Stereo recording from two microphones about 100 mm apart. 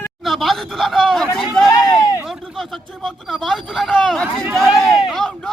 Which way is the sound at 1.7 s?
40° left (ahead or behind).